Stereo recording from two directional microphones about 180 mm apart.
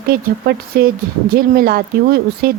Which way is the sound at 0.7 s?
60° right (ahead or behind).